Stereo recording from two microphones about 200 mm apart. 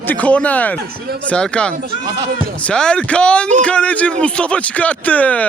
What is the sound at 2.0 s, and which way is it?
Speech, 20° right (ahead or behind).